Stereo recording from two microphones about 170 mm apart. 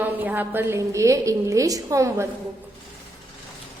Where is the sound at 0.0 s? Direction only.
10° right (ahead or behind).